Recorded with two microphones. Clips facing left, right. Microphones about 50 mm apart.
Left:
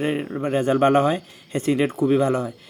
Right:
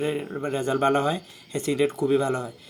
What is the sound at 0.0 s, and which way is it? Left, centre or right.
Speech, left.